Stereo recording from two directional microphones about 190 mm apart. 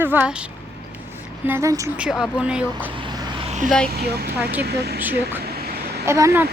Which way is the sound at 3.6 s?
5° left (ahead or behind).